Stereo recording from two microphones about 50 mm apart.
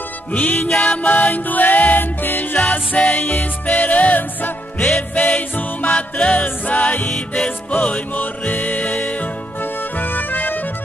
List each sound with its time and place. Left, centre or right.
0.3 s music: left
2.6 s music: left
4.7 s music: centre
5.1 s music: left
6.4 s music: left
7.1 s music: centre
7.4 s music: left